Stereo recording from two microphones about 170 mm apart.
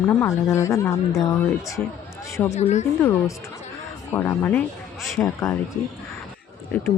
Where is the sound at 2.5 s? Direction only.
40° left (ahead or behind).